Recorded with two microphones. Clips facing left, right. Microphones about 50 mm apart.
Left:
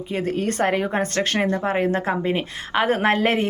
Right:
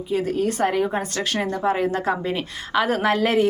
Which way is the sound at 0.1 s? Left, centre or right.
Left.